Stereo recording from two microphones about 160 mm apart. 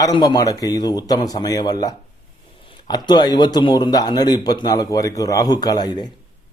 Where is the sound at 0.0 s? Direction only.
25° left (ahead or behind).